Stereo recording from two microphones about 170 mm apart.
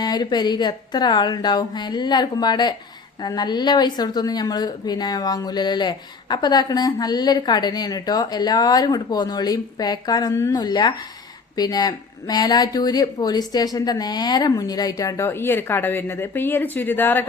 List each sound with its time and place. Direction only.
0.0 s a woman's voice: 25° left (ahead or behind)